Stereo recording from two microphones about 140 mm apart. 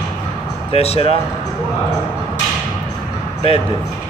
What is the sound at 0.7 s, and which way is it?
Speech, 45° left (ahead or behind).